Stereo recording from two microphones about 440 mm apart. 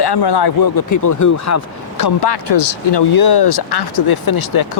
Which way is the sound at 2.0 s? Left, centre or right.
Left.